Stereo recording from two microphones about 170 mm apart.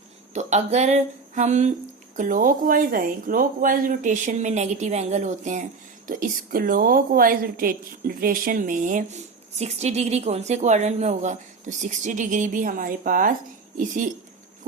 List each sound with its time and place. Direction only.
0.3 s a woman's voice: 40° right (ahead or behind)
9.6 s a woman's voice: 40° right (ahead or behind)